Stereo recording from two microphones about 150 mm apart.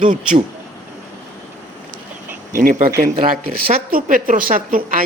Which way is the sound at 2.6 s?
70° right (ahead or behind).